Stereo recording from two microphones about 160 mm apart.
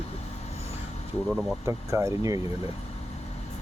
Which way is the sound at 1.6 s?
20° right (ahead or behind).